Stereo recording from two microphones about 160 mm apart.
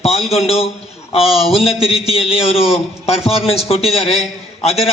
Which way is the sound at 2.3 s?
35° left (ahead or behind).